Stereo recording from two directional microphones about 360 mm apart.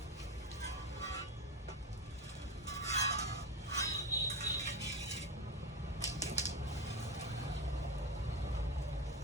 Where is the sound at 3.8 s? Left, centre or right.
Centre.